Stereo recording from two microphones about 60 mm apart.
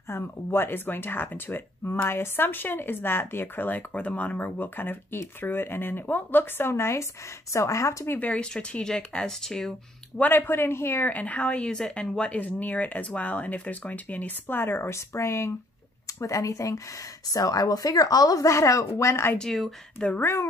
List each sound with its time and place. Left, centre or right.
0.1 s speech: left
6.7 s speech: left
8.2 s speech: centre
10.2 s speech: left
11.1 s speech: left
15.0 s speech: left
16.2 s speech: left
17.3 s speech: left
19.3 s speech: centre
20.2 s speech: left